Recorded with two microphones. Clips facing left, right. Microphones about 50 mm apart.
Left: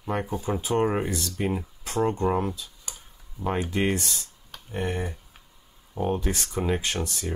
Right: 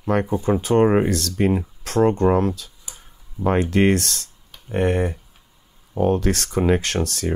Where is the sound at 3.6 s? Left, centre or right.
Right.